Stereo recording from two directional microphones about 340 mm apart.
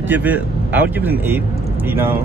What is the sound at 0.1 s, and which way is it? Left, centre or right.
Speech, centre.